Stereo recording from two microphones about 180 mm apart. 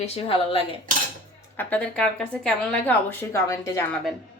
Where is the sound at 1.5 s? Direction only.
10° left (ahead or behind).